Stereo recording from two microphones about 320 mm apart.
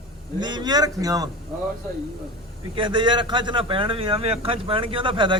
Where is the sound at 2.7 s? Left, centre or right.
Centre.